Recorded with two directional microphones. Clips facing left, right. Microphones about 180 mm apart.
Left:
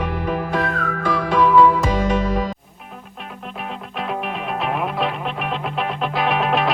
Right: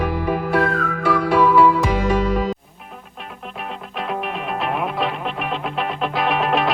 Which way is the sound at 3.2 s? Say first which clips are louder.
Left 1 dB; centre (ahead or behind).